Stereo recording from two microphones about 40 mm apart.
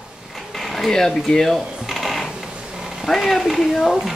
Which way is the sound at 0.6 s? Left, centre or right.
Centre.